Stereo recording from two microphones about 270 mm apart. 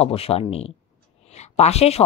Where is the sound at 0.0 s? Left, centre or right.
Left.